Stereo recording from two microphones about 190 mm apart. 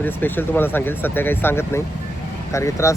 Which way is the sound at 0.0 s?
10° left (ahead or behind).